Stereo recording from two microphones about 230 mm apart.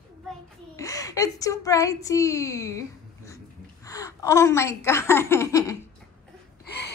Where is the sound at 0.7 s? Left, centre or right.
Centre.